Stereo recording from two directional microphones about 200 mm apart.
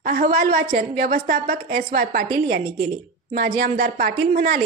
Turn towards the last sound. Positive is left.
turn(degrees=-45)  # may be behind; listen again after turning